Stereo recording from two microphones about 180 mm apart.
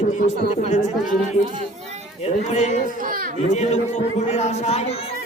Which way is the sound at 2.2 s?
35° left (ahead or behind).